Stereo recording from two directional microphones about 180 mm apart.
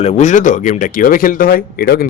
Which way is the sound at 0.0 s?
40° left (ahead or behind).